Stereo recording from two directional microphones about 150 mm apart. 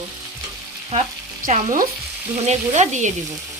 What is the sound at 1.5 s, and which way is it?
Speech, 55° right (ahead or behind).